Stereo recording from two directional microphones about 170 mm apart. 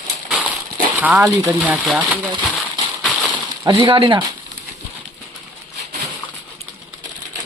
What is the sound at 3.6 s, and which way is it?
Speech, 30° right (ahead or behind).